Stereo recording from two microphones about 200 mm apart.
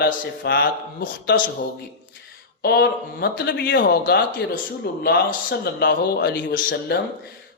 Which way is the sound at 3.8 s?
45° left (ahead or behind).